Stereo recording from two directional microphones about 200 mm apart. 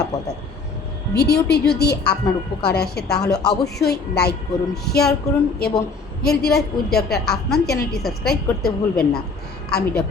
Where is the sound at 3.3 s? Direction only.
20° left (ahead or behind).